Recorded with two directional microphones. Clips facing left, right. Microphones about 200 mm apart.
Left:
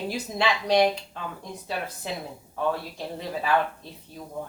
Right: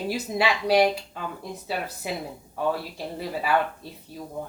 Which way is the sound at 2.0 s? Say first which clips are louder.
Right 3 dB; 10° right (ahead or behind).